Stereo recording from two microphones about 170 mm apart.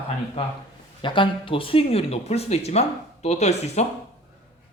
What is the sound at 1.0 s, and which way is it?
Speech, 30° left (ahead or behind).